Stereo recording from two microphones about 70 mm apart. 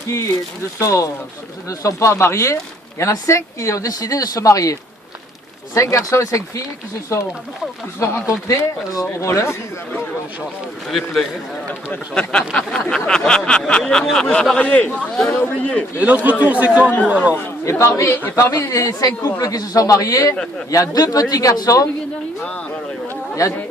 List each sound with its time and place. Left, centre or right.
0.8 s speech: left
7.9 s speech: left
10.8 s a man's voice: centre
12.1 s speech: centre
16.0 s speech: right
17.7 s a man's voice: left
18.7 s speech: left
22.4 s speech: centre